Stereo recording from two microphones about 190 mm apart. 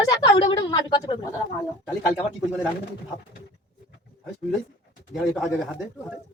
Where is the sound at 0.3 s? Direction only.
25° left (ahead or behind).